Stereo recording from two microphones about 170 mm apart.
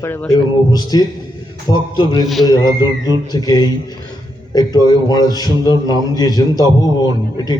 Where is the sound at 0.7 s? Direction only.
25° left (ahead or behind).